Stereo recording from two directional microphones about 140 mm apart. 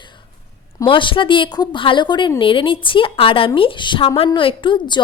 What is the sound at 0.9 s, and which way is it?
Speech, 35° left (ahead or behind).